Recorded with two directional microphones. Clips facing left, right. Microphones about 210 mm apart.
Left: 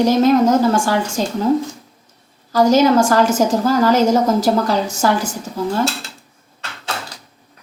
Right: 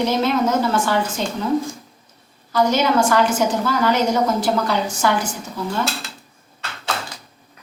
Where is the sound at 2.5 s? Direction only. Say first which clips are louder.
Left 5 dB; 40° left (ahead or behind).